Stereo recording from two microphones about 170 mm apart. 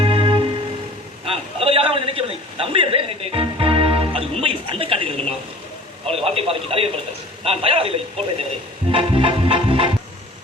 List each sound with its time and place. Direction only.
0.0 s music: 30° right (ahead or behind)
1.2 s a sound: 35° right (ahead or behind)
6.1 s speech: 35° right (ahead or behind)
8.9 s music: 30° right (ahead or behind)